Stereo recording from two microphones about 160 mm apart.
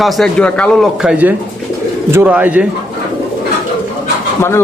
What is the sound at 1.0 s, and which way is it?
Speech, 10° right (ahead or behind).